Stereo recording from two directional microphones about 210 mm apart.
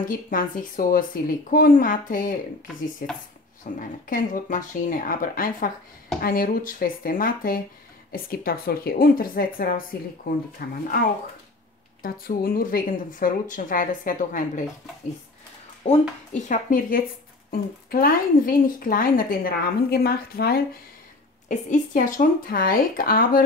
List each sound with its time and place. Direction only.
0.0 s a woman's voice: 40° left (ahead or behind)
12.0 s speech: 45° left (ahead or behind)
15.8 s a woman's voice: 30° left (ahead or behind)
16.4 s a woman's voice: 40° left (ahead or behind)